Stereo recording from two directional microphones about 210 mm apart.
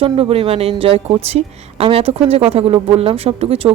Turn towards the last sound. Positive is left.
turn(degrees=-30)  # may be behind; listen again after turning